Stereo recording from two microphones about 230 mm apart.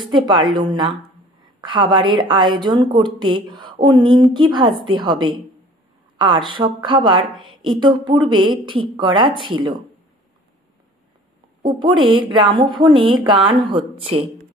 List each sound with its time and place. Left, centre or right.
0.1 s a woman's voice: centre
11.6 s a woman's voice: centre